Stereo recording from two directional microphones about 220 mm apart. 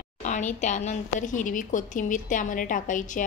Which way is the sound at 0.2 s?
35° left (ahead or behind).